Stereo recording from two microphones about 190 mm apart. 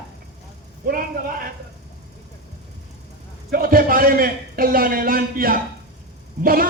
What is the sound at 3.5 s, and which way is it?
A man's voice, 50° right (ahead or behind).